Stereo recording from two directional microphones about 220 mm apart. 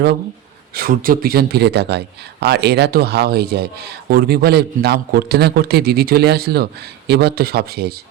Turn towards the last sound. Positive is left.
turn(degrees=-45)  # may be behind; listen again after turning